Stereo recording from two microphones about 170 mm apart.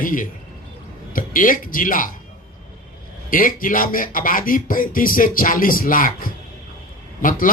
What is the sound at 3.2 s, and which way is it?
Speech, 55° left (ahead or behind).